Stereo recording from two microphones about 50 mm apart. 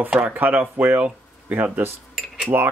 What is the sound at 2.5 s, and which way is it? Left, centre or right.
Speech, right.